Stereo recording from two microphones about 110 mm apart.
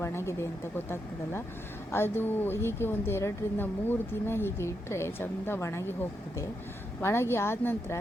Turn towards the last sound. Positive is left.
turn(degrees=20)  # may be behind; listen again after turning